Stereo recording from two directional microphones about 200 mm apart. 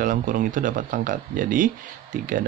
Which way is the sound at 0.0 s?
40° right (ahead or behind).